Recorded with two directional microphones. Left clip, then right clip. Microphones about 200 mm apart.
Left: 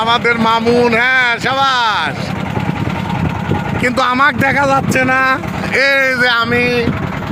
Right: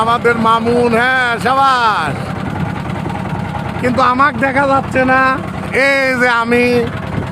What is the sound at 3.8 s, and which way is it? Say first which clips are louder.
Speech: right 1 dB; 20° left (ahead or behind).